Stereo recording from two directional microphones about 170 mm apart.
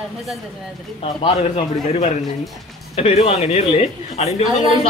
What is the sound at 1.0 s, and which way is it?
A man's voice, 35° left (ahead or behind).